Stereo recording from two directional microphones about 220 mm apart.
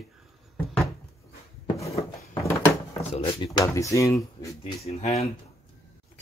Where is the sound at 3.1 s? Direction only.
20° left (ahead or behind).